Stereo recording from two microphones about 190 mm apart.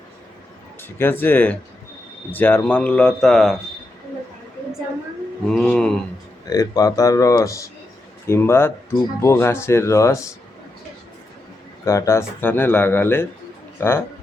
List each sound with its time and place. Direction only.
0.8 s speech: 10° left (ahead or behind)
5.5 s speech: 5° left (ahead or behind)
6.5 s speech: 20° left (ahead or behind)
11.9 s speech: 15° left (ahead or behind)